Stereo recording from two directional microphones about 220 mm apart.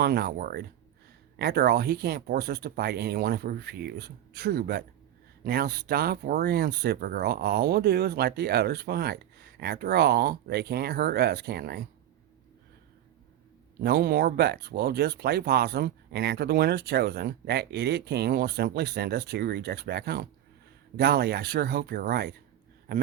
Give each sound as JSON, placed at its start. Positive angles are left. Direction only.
{"t": 0.0, "sound": "speech", "side_deg": -45}
{"t": 13.8, "sound": "speech", "side_deg": -45}